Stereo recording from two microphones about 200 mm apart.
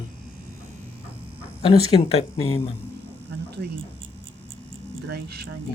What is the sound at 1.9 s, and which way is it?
Speech, 30° left (ahead or behind).